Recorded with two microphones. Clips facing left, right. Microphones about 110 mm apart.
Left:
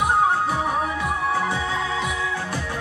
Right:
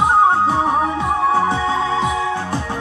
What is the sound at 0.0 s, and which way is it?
Music, 30° right (ahead or behind).